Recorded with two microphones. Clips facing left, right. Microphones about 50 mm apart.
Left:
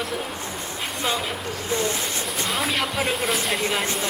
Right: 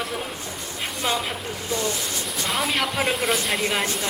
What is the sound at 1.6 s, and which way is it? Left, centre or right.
Speech, left.